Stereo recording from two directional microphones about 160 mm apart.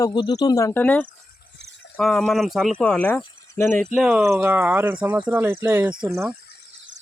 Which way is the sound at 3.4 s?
20° left (ahead or behind).